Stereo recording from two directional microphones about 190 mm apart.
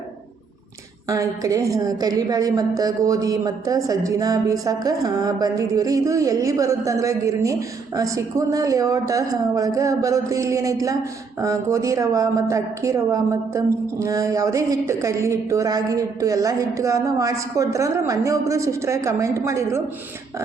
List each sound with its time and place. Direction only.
1.0 s a woman's voice: 15° right (ahead or behind)